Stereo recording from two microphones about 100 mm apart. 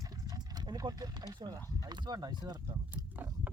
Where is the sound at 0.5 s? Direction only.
40° right (ahead or behind).